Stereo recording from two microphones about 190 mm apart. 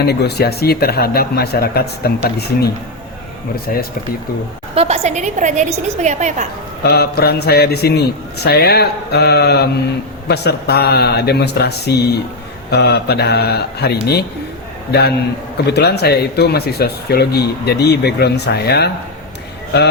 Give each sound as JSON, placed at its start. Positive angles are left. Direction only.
{"t": 0.0, "sound": "speech", "side_deg": 60}
{"t": 4.7, "sound": "a woman's voice", "side_deg": -35}
{"t": 6.8, "sound": "speech", "side_deg": 55}
{"t": 15.7, "sound": "speech", "side_deg": 60}